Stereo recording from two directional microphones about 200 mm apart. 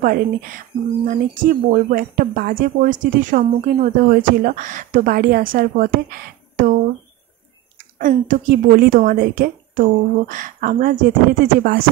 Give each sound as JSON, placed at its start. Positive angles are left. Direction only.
{"t": 0.0, "sound": "speech", "side_deg": -45}